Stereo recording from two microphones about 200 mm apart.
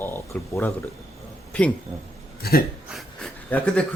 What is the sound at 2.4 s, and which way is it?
Speech, 50° left (ahead or behind).